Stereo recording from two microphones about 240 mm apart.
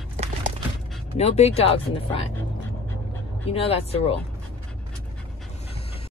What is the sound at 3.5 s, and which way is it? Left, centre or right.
Speech, left.